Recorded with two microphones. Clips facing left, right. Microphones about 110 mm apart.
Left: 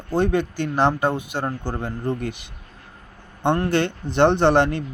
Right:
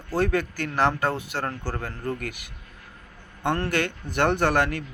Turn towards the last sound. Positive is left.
turn(degrees=25)  # may be behind; listen again after turning